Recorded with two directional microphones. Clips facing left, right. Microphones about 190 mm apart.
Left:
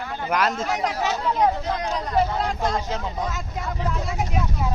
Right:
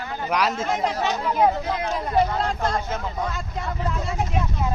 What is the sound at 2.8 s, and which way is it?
Speech, 15° left (ahead or behind).